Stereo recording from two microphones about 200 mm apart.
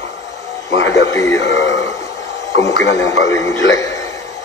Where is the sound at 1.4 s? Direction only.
65° left (ahead or behind).